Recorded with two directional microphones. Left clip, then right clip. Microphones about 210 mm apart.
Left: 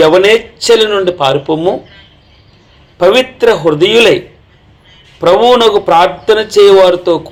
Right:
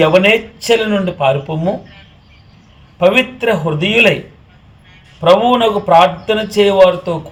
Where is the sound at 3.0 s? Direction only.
35° left (ahead or behind).